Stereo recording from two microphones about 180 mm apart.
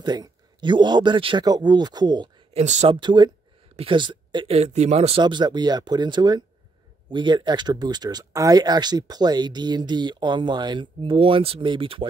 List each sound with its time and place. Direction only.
0.0 s speech: 20° right (ahead or behind)
2.5 s speech: 40° right (ahead or behind)
2.9 s speech: 25° right (ahead or behind)